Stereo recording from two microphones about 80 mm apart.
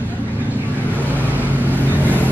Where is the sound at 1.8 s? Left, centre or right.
Right.